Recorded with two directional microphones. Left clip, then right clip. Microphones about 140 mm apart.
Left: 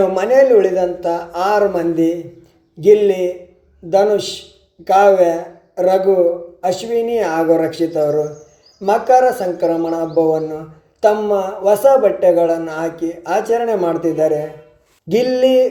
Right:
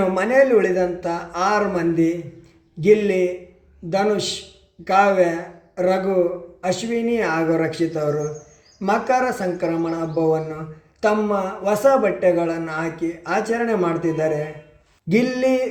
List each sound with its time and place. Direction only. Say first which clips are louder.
0.1 s speech: left 5 dB; 20° left (ahead or behind)
4.9 s speech: left 6 dB; 20° left (ahead or behind)